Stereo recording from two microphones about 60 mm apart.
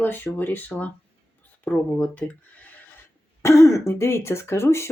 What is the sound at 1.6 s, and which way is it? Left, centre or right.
Speech, left.